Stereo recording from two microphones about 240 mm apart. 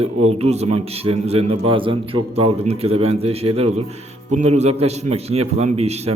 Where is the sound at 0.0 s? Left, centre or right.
Right.